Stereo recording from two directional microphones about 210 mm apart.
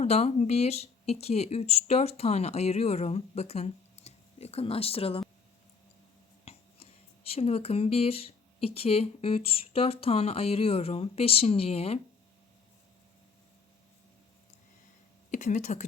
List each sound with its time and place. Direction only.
0.0 s speech: 30° left (ahead or behind)
6.4 s a sound: 30° left (ahead or behind)
7.3 s speech: 30° left (ahead or behind)
15.3 s speech: 35° left (ahead or behind)